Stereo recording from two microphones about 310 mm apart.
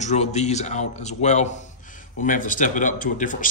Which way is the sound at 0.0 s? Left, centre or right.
Left.